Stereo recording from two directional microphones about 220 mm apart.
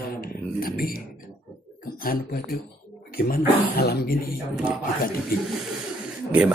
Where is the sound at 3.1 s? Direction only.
45° left (ahead or behind).